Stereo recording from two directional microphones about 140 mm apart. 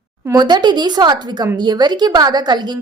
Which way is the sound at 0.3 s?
30° right (ahead or behind).